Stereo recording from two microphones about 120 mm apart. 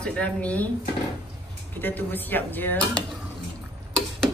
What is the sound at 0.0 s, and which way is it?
Speech, 10° left (ahead or behind).